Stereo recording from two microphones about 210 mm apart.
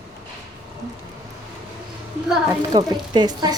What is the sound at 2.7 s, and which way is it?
Speech, 20° right (ahead or behind).